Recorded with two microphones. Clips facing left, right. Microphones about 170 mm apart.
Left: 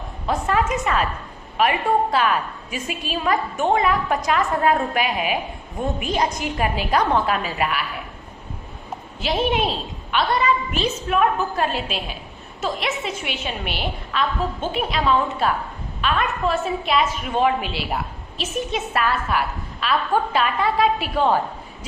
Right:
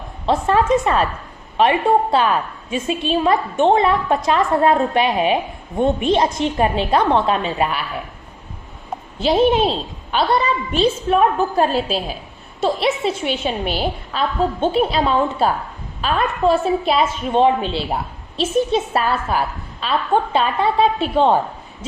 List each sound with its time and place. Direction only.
0.3 s a woman's voice: 30° right (ahead or behind)
9.1 s a woman's voice: 30° right (ahead or behind)